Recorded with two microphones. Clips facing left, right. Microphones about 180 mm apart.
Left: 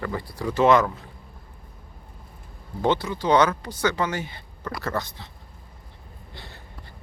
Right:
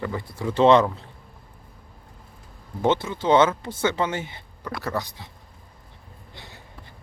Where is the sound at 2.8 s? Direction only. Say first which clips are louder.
Right 1 dB; 20° right (ahead or behind).